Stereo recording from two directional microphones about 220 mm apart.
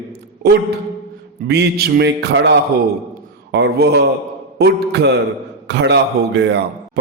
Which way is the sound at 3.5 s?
50° right (ahead or behind).